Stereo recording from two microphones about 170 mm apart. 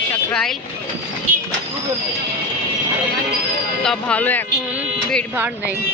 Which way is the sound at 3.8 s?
5° left (ahead or behind).